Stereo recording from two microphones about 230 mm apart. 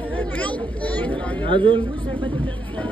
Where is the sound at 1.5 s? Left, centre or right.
Right.